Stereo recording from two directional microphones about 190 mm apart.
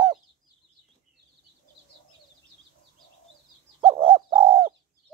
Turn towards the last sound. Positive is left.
turn(degrees=-30)  # may be behind; listen again after turning